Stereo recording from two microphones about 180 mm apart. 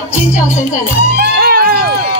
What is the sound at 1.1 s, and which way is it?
Music, 60° right (ahead or behind).